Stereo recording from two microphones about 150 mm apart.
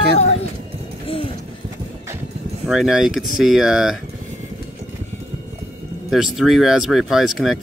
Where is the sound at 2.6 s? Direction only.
5° right (ahead or behind).